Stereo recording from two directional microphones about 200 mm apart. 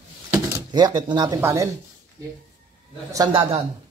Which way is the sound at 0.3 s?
15° right (ahead or behind).